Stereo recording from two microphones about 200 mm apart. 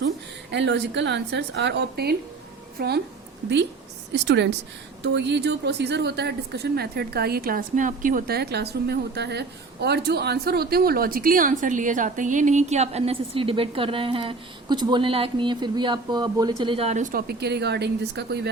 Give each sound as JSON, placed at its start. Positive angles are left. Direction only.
{"t": 0.5, "sound": "a woman's voice", "side_deg": -60}
{"t": 4.1, "sound": "a woman's voice", "side_deg": -60}